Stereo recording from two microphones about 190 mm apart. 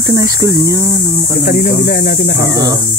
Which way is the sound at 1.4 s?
50° left (ahead or behind).